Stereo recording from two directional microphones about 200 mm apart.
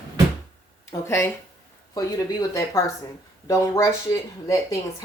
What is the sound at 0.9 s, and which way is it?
Speech, 15° left (ahead or behind).